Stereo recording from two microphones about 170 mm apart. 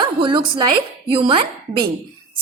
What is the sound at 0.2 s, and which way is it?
A woman's voice, 30° right (ahead or behind).